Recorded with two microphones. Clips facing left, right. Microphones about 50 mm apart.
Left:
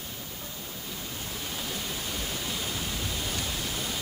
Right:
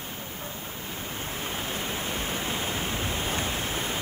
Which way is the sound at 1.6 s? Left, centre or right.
Right.